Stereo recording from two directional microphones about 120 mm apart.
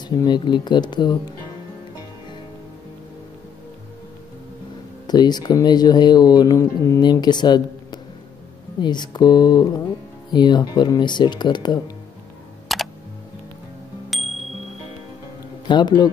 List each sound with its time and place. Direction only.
0.0 s speech: 35° left (ahead or behind)
5.0 s speech: 35° left (ahead or behind)
12.7 s computer keyboard: centre (ahead or behind)
14.1 s music: centre (ahead or behind)
15.6 s speech: 40° left (ahead or behind)